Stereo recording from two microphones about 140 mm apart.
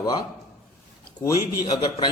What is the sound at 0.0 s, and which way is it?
A man's voice, 30° left (ahead or behind).